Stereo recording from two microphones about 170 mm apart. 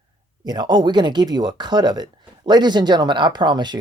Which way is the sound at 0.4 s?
25° right (ahead or behind).